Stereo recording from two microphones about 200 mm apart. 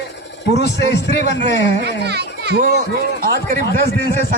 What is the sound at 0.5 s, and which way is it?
Speech, 60° left (ahead or behind).